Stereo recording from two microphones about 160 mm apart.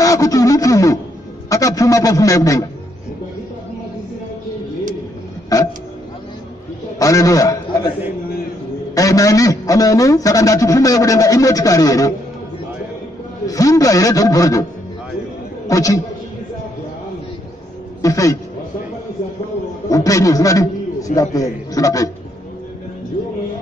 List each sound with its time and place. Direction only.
0.0 s a sound: 20° left (ahead or behind)
1.5 s a man's voice: 20° left (ahead or behind)
5.5 s a sound: 20° left (ahead or behind)
7.0 s a man's voice: 20° left (ahead or behind)
8.9 s a man's voice: 20° left (ahead or behind)
13.5 s a man's voice: 20° left (ahead or behind)
15.7 s a man's voice: 20° left (ahead or behind)
18.0 s a man's voice: 20° left (ahead or behind)
19.9 s a man's voice: 20° left (ahead or behind)